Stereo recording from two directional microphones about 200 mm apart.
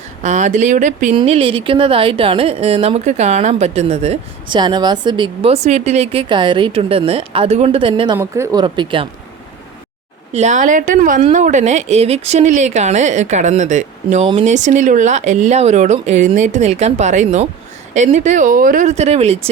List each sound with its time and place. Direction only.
0.2 s a woman's voice: 35° right (ahead or behind)
8.2 s speech: 15° right (ahead or behind)
8.6 s a woman's voice: 25° right (ahead or behind)
10.3 s a woman's voice: 35° right (ahead or behind)